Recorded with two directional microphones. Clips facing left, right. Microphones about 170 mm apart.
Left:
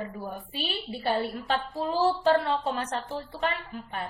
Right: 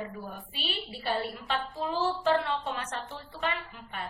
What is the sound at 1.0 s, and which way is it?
A woman's voice, 40° left (ahead or behind).